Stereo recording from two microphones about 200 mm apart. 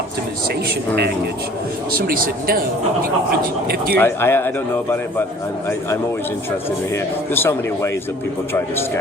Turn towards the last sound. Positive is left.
turn(degrees=10)  # may be behind; listen again after turning